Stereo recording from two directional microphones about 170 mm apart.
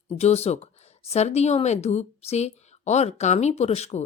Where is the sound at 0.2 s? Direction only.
40° left (ahead or behind).